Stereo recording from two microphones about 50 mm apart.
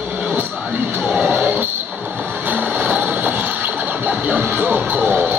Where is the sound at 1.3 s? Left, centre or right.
Right.